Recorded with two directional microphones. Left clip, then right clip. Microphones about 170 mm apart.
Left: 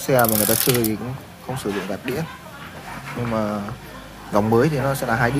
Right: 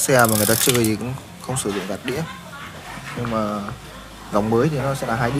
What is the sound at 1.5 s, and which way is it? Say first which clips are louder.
Speech: right 1 dB; 5° right (ahead or behind).